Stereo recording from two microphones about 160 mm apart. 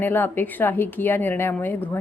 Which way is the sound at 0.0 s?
15° left (ahead or behind).